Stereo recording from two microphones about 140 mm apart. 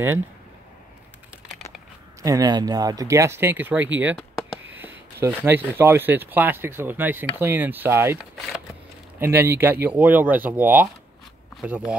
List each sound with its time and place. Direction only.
2.2 s speech: 25° right (ahead or behind)
9.2 s speech: 15° right (ahead or behind)